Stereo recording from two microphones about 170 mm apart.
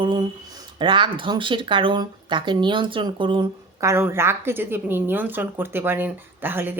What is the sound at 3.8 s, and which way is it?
A woman's voice, 15° right (ahead or behind).